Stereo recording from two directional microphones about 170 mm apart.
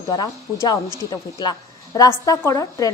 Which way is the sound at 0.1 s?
25° left (ahead or behind).